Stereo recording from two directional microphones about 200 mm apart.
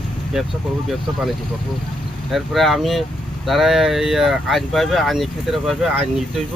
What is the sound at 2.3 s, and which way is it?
Speech, centre (ahead or behind).